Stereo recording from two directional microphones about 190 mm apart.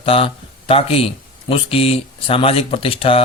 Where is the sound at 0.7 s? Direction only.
30° left (ahead or behind).